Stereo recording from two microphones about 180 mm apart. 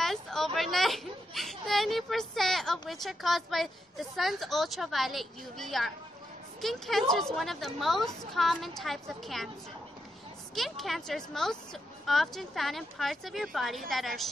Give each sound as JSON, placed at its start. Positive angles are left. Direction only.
{"t": 0.0, "sound": "a sound", "side_deg": 0}
{"t": 0.6, "sound": "a woman's voice", "side_deg": 0}
{"t": 10.5, "sound": "a woman's voice", "side_deg": 0}